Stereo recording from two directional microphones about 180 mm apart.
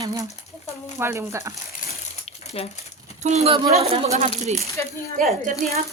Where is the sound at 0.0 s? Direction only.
20° right (ahead or behind).